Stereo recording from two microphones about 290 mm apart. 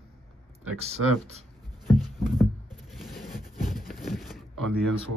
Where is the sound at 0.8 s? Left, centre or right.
Right.